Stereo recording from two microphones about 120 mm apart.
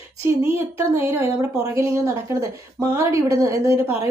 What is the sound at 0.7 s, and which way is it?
A woman's voice, 20° right (ahead or behind).